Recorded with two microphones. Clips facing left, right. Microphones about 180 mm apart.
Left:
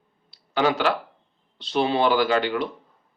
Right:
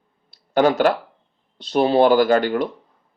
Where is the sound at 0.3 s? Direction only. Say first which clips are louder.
Right 5 dB; 45° right (ahead or behind).